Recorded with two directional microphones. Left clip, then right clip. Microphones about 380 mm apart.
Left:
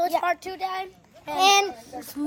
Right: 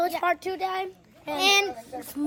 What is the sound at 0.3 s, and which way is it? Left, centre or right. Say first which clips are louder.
Speech: even; centre.